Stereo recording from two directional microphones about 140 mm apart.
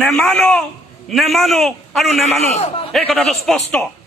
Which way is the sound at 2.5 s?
45° left (ahead or behind).